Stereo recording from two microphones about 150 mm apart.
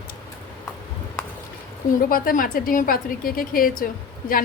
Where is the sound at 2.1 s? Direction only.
70° left (ahead or behind).